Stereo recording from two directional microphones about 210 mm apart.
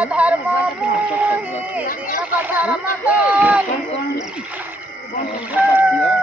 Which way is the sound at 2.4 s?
10° right (ahead or behind).